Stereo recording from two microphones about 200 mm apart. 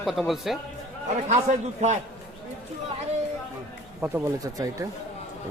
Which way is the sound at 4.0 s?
15° right (ahead or behind).